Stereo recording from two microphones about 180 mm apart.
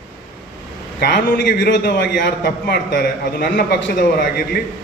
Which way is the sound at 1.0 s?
60° left (ahead or behind).